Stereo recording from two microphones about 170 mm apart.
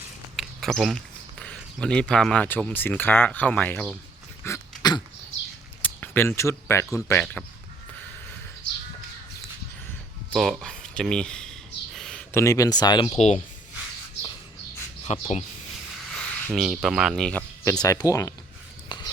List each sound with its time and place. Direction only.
0.3 s speech: centre (ahead or behind)
4.4 s throat clearing: 20° left (ahead or behind)
5.8 s speech: 10° left (ahead or behind)
10.3 s speech: centre (ahead or behind)
11.9 s a sound: 5° left (ahead or behind)
12.3 s speech: 15° left (ahead or behind)
13.1 s speech: 40° left (ahead or behind)
15.0 s speech: 40° left (ahead or behind)
16.5 s speech: centre (ahead or behind)
17.7 s speech: 20° left (ahead or behind)
18.9 s a sound: 25° left (ahead or behind)